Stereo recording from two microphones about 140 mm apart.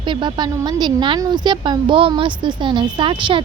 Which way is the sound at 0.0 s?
35° right (ahead or behind).